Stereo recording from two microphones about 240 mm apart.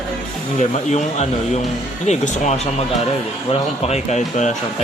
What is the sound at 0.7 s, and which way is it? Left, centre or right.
Speech, left.